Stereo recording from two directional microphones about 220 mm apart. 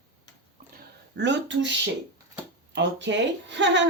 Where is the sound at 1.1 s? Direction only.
50° right (ahead or behind).